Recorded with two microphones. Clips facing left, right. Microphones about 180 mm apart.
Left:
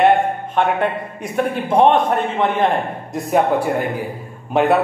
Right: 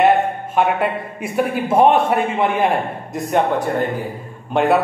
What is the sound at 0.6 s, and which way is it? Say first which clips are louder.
A man's voice: right 1 dB; 5° right (ahead or behind).